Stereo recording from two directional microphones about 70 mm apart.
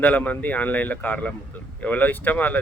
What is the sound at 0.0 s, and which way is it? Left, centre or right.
A man's voice, left.